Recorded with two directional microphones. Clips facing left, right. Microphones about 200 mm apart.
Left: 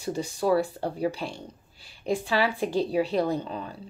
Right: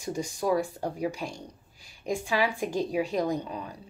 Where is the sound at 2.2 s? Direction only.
15° right (ahead or behind).